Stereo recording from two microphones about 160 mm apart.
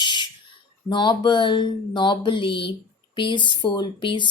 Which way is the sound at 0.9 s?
30° left (ahead or behind).